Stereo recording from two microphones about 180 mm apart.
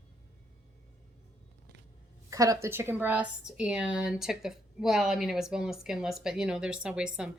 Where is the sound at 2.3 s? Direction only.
20° right (ahead or behind).